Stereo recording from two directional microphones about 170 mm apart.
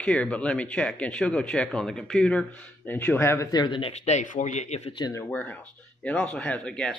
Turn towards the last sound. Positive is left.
turn(degrees=5)  # may be behind; listen again after turning